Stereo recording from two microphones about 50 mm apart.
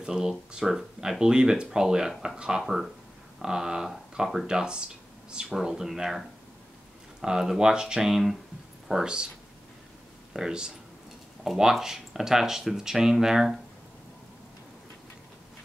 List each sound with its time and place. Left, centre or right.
0.0 s speech: centre
2.6 s speech: centre
8.8 s speech: centre
10.3 s speech: centre